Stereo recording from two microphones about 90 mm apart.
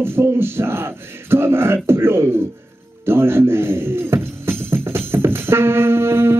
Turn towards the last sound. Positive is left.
turn(degrees=-25)  # may be behind; listen again after turning